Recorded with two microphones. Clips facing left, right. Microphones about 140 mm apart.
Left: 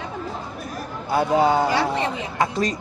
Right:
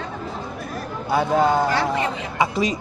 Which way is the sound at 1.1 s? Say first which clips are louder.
Even; 5° left (ahead or behind).